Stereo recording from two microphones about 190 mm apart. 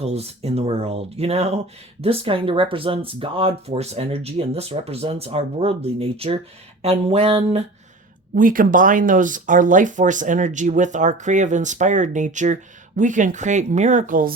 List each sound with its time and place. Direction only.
0.0 s speech: 35° right (ahead or behind)
8.4 s speech: 45° right (ahead or behind)